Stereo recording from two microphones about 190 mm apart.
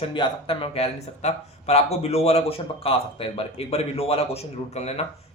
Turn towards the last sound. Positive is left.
turn(degrees=35)  # may be behind; listen again after turning